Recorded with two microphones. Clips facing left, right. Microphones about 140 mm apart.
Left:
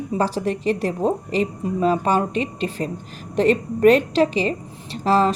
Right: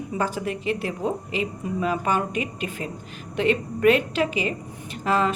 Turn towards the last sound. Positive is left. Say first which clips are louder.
# left 5 dB
turn(degrees=35)  # may be behind; listen again after turning